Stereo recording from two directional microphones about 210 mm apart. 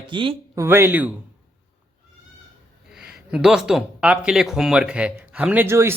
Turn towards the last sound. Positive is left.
turn(degrees=-10)  # may be behind; listen again after turning